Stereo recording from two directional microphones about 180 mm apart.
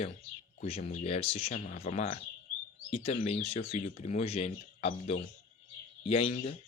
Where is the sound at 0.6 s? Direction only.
35° left (ahead or behind).